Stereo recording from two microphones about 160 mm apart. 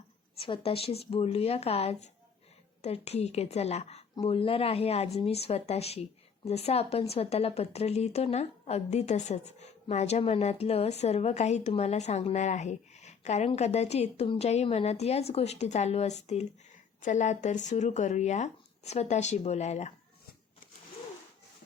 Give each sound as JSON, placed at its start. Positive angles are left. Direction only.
{"t": 0.3, "sound": "speech", "side_deg": 35}